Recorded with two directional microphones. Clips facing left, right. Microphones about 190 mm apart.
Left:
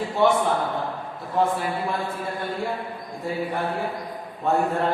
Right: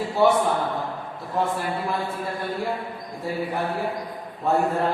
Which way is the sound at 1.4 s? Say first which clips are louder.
Left 3 dB; centre (ahead or behind).